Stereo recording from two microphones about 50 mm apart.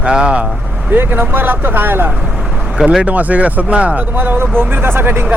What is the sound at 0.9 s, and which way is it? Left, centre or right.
Speech, right.